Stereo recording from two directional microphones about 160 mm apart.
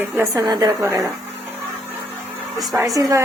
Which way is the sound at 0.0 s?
20° right (ahead or behind).